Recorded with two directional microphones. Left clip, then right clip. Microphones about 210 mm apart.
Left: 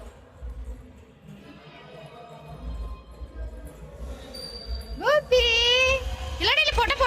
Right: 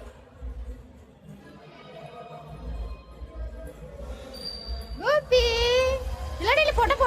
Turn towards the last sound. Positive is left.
turn(degrees=-10)  # may be behind; listen again after turning